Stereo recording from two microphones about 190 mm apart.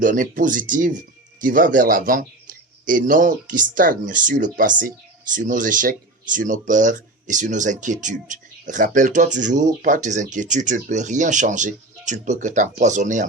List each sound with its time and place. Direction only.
0.0 s speech: 45° right (ahead or behind)